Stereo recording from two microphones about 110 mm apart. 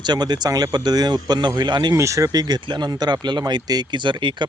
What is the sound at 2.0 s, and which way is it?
Speech, 30° right (ahead or behind).